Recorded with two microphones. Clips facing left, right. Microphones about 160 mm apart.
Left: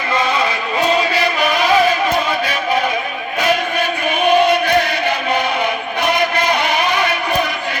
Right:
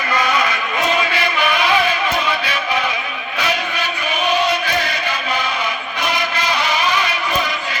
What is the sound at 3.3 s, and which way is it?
Chant, 50° left (ahead or behind).